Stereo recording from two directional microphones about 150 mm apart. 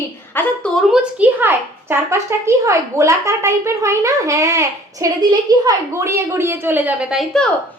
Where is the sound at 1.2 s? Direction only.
15° right (ahead or behind).